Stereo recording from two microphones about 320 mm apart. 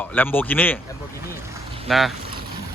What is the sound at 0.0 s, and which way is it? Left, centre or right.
Speech, centre.